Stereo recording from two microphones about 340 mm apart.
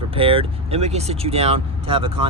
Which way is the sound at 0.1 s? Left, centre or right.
Centre.